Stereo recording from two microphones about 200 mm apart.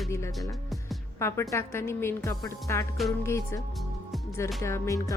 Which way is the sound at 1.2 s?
15° left (ahead or behind).